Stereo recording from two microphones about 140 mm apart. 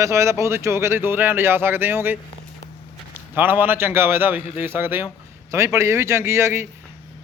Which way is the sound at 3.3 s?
15° right (ahead or behind).